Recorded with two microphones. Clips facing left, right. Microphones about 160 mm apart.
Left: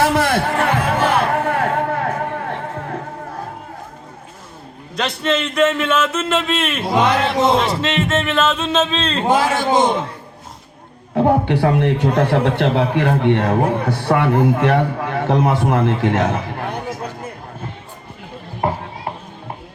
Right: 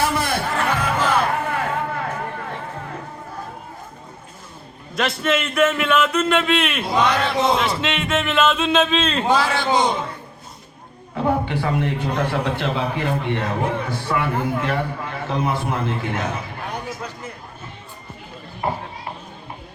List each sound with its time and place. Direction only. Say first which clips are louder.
0.0 s music: left 6 dB; 85° left
0.8 s music: left 3 dB; 60° left (ahead or behind)
4.9 s a man's voice: left 1 dB; centre (ahead or behind)
6.9 s speech: left 3 dB; 20° left (ahead or behind)
7.8 s a man's voice: left 4 dB; centre (ahead or behind)
9.2 s a man's voice: left 7 dB; 50° left (ahead or behind)
11.1 s a man's voice: left 6 dB; 60° left (ahead or behind)